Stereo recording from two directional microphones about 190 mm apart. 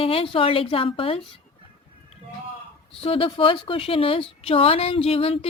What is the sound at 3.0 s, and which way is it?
Speech, 30° left (ahead or behind).